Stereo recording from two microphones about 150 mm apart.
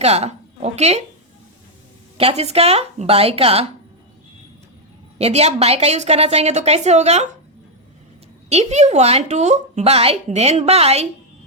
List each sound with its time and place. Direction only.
0.0 s speech: 45° right (ahead or behind)
2.1 s speech: 45° right (ahead or behind)
5.1 s a woman's voice: 45° right (ahead or behind)
8.4 s a woman's voice: 45° right (ahead or behind)